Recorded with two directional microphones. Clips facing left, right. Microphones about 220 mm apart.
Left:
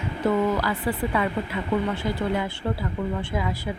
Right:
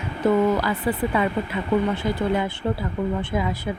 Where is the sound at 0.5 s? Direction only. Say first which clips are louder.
Right 3 dB; 20° right (ahead or behind).